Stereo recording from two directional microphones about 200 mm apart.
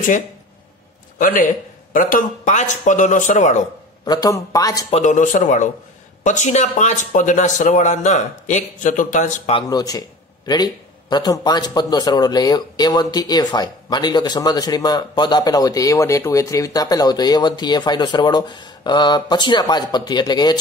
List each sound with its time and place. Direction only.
1.1 s speech: 45° left (ahead or behind)
4.0 s speech: 20° left (ahead or behind)
4.9 s speech: 40° left (ahead or behind)
9.6 s speech: 20° left (ahead or behind)